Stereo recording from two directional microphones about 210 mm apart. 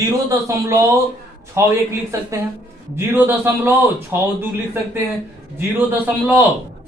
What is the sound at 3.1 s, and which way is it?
A man's voice, 10° right (ahead or behind).